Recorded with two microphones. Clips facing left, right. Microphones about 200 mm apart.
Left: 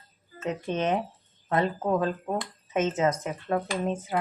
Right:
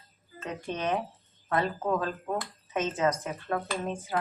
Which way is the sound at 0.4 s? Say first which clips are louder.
Left 5 dB; 20° left (ahead or behind).